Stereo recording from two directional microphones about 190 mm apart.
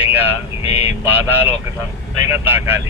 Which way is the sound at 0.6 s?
35° left (ahead or behind).